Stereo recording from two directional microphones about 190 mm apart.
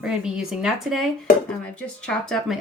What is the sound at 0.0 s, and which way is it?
Speech, 5° right (ahead or behind).